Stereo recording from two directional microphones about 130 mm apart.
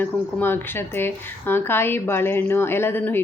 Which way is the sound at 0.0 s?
15° left (ahead or behind).